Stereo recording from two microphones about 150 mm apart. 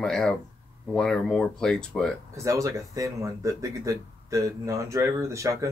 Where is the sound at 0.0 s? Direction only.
5° left (ahead or behind).